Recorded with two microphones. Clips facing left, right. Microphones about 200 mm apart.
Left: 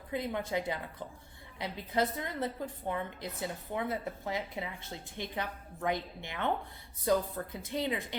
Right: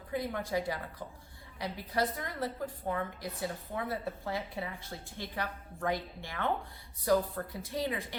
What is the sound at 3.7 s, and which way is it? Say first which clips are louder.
Speech: left 2 dB; 20° left (ahead or behind).